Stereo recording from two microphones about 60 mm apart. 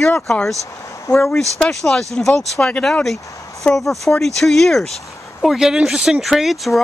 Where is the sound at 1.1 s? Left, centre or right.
Centre.